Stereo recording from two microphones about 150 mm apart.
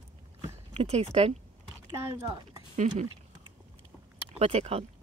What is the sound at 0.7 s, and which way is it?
Speech, 45° right (ahead or behind).